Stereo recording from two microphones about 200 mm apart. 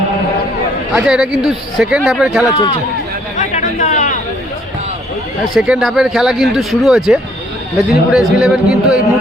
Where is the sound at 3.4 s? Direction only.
40° left (ahead or behind).